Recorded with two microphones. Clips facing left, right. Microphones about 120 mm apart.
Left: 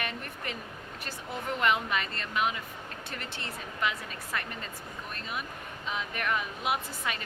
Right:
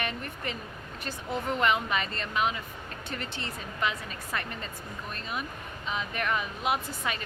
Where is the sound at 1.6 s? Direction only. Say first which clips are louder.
Even; centre (ahead or behind).